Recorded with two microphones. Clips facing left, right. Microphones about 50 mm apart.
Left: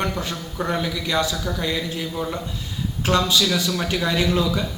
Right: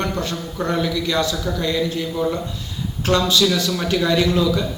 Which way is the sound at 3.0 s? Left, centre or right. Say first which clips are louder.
Right 3 dB; centre.